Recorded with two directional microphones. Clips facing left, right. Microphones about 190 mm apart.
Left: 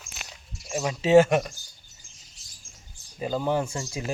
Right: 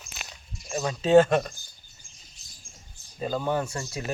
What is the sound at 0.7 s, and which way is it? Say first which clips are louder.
Speech: left 1 dB; 10° left (ahead or behind).